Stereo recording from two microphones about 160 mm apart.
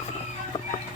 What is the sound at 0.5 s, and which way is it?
Music, 45° left (ahead or behind).